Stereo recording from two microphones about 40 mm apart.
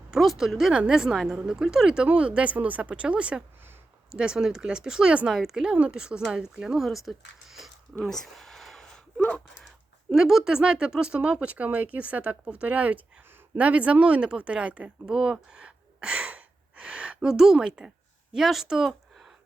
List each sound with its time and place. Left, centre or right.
0.2 s speech: centre
0.7 s speech: right
1.3 s speech: centre
2.1 s speech: right
6.7 s speech: centre
8.0 s a sound: centre
9.1 s a sound: left
10.2 s speech: centre; by 14.9 s right
15.0 s speech: right
16.7 s gasp: right
17.2 s speech: centre
18.3 s speech: centre